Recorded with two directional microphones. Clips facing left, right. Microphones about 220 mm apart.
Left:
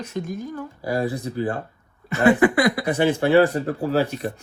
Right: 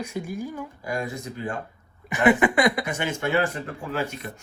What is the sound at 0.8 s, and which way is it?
Speech, 35° left (ahead or behind).